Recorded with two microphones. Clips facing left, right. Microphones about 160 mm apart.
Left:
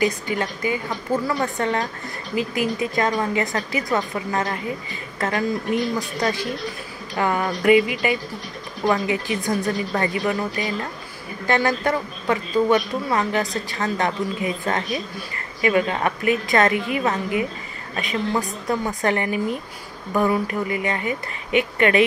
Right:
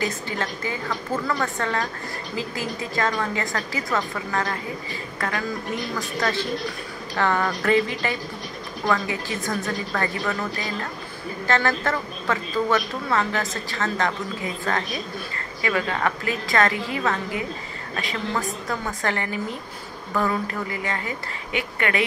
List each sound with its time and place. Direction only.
0.0 s a woman's voice: 15° left (ahead or behind)